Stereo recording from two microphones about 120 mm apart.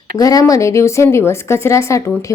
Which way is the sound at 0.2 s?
30° left (ahead or behind).